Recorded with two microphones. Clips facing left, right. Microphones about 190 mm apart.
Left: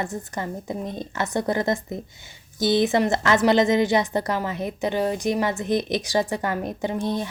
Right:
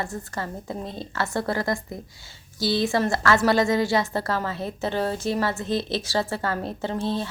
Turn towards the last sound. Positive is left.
turn(degrees=15)  # may be behind; listen again after turning